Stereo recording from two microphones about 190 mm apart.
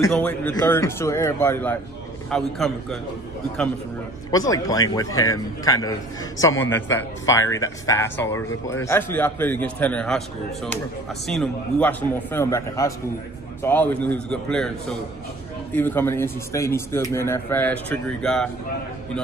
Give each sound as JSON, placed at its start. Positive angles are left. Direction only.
{"t": 0.1, "sound": "a man's voice", "side_deg": 10}
{"t": 4.3, "sound": "a man's voice", "side_deg": 20}